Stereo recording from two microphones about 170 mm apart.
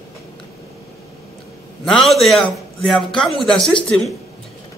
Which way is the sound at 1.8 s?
Centre (ahead or behind).